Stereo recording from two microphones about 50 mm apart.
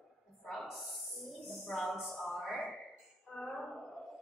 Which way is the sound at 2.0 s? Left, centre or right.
Centre.